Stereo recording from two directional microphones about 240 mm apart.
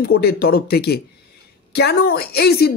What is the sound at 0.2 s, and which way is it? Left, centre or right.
A woman's voice, left.